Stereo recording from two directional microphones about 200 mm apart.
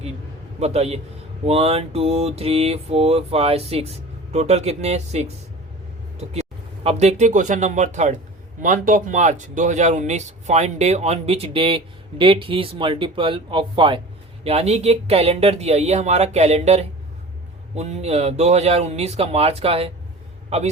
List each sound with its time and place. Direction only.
0.6 s speech: 30° right (ahead or behind)
6.8 s speech: 35° right (ahead or behind)